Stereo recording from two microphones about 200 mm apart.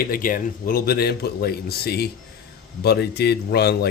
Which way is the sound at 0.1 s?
45° left (ahead or behind).